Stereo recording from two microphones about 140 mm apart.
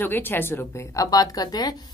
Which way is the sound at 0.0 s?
15° left (ahead or behind).